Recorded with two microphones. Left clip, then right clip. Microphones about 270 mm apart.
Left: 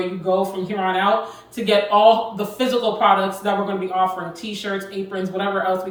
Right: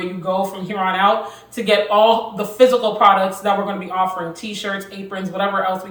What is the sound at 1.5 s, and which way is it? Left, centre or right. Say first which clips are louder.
A woman's voice: right 2 dB; centre.